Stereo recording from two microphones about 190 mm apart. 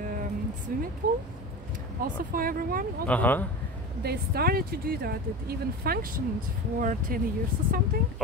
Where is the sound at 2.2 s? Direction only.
50° right (ahead or behind).